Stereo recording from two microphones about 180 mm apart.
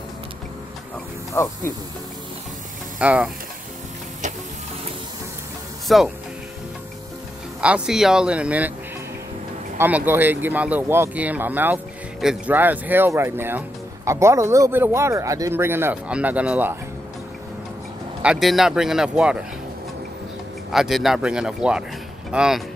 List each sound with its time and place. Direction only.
1.3 s speech: 15° left (ahead or behind)
3.0 s speech: 5° right (ahead or behind)
5.9 s speech: centre (ahead or behind)
7.6 s speech: 5° right (ahead or behind)
9.8 s speech: 10° right (ahead or behind)
18.2 s speech: centre (ahead or behind)
20.7 s speech: centre (ahead or behind)